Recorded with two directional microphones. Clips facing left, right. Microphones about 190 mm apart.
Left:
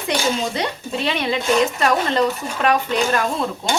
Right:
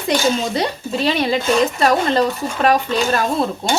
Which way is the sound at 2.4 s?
35° right (ahead or behind).